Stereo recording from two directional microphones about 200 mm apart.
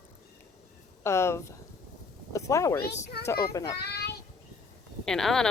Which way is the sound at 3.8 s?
55° left (ahead or behind).